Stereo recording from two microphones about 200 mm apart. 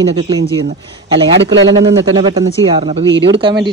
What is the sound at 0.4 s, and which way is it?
Speech, 60° right (ahead or behind).